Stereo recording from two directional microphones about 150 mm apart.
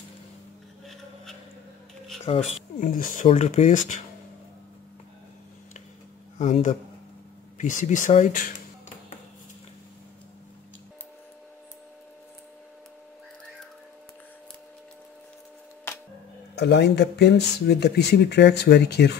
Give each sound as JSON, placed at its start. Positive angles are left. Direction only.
{"t": 2.2, "sound": "speech", "side_deg": 40}
{"t": 2.8, "sound": "speech", "side_deg": 60}
{"t": 3.3, "sound": "speech", "side_deg": 45}
{"t": 6.3, "sound": "speech", "side_deg": 55}
{"t": 16.5, "sound": "speech", "side_deg": 90}